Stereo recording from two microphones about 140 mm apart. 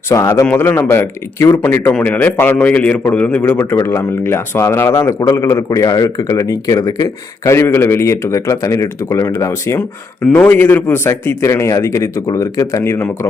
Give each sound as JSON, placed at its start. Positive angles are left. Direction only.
{"t": 0.1, "sound": "a man's voice", "side_deg": 20}